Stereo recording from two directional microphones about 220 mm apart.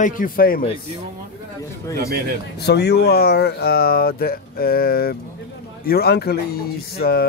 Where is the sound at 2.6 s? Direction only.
50° left (ahead or behind).